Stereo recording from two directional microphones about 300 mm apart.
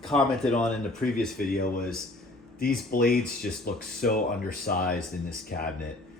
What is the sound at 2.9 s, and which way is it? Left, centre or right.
Speech, left.